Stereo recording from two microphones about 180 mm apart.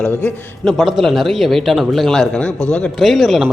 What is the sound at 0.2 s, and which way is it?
A man's voice, 5° left (ahead or behind).